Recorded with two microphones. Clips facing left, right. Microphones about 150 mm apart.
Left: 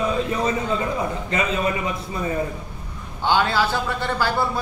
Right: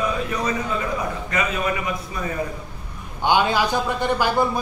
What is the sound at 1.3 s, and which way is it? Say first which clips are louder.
Speech: left 1 dB; 25° left (ahead or behind).